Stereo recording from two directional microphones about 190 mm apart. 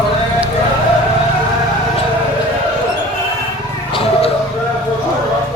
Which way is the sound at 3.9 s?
30° left (ahead or behind).